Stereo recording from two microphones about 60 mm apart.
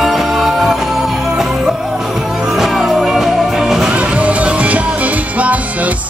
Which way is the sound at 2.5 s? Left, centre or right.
Centre.